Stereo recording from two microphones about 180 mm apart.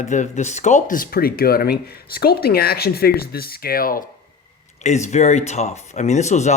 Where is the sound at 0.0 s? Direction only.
40° left (ahead or behind).